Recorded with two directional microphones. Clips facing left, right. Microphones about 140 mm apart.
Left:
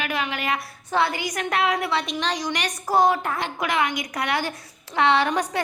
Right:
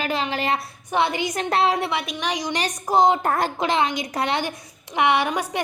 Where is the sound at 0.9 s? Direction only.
20° right (ahead or behind).